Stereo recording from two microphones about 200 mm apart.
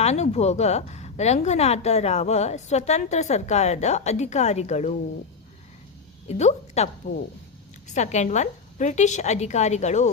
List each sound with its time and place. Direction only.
0.0 s a woman's voice: 30° left (ahead or behind)
6.2 s a woman's voice: 35° left (ahead or behind)
7.9 s a woman's voice: 35° left (ahead or behind)